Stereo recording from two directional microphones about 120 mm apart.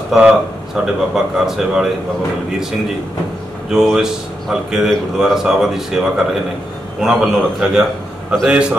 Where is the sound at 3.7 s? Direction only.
5° right (ahead or behind).